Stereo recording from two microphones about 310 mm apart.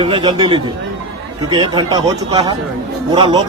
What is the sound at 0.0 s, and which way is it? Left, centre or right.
A man's voice, centre.